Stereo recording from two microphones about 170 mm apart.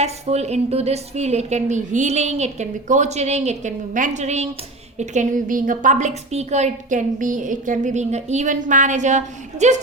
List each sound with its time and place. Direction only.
0.0 s a woman's voice: 40° right (ahead or behind)